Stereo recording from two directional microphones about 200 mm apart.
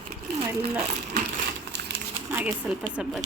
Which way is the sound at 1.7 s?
55° right (ahead or behind).